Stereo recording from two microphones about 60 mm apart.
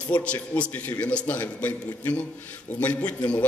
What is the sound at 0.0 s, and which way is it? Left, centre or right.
Speech, left.